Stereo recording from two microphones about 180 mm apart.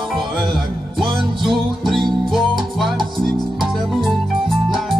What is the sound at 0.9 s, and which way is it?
Music, centre (ahead or behind).